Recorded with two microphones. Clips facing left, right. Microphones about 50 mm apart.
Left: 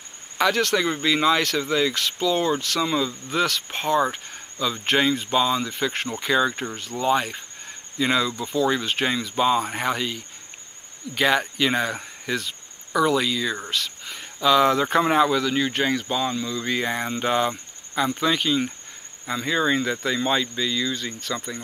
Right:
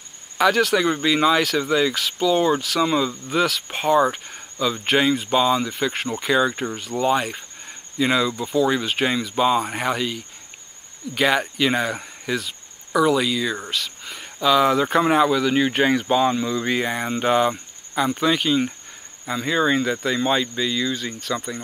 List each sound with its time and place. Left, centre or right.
0.4 s speech: centre
15.5 s speech: centre
16.7 s speech: centre